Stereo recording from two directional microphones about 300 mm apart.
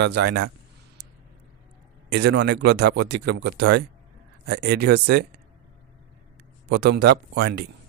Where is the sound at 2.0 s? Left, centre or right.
Right.